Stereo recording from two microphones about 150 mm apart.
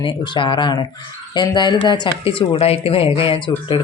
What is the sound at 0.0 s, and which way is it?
Speech, 30° left (ahead or behind).